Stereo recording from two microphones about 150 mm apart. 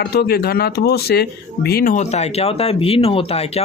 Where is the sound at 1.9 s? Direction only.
50° left (ahead or behind).